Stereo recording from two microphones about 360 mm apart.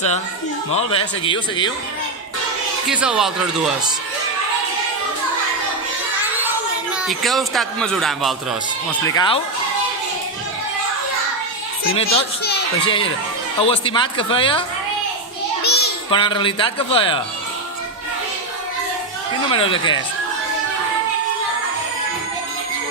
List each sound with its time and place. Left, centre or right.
0.8 s a man's voice: centre
2.8 s speech: centre
6.9 s speech: centre
9.1 s a man's voice: centre
11.9 s a man's voice: centre
15.6 s child singing: left
16.0 s a man's voice: centre
19.4 s a man's voice: centre